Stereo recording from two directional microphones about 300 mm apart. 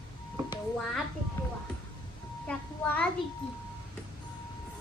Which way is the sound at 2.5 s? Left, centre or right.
Centre.